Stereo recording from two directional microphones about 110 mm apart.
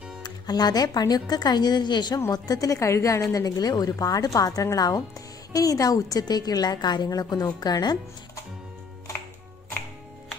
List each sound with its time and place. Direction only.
0.2 s a woman's voice: 40° left (ahead or behind)